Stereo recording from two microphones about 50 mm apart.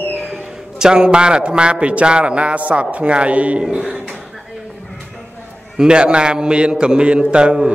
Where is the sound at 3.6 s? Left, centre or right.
Centre.